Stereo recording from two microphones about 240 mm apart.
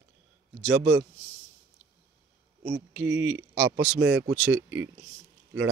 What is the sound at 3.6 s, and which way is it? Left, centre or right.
Speech, centre.